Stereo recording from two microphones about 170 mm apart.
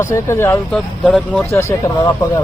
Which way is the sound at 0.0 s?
15° left (ahead or behind).